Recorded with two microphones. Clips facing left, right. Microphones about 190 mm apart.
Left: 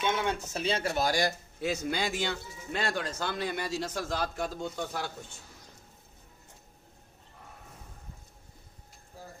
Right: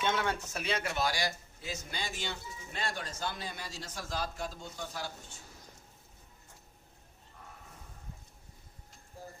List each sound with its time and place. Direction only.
0.0 s speech: 20° left (ahead or behind); by 1.3 s 45° left (ahead or behind)
1.6 s speech: 75° left (ahead or behind)